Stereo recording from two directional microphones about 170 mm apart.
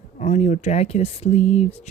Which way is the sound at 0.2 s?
45° left (ahead or behind).